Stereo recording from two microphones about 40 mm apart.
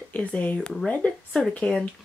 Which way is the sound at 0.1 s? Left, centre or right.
Left.